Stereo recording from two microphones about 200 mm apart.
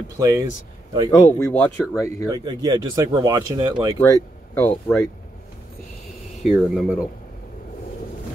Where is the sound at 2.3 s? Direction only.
20° right (ahead or behind).